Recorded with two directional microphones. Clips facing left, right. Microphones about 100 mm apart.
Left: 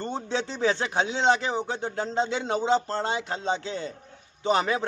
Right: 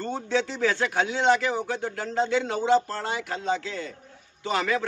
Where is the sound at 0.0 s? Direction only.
20° left (ahead or behind).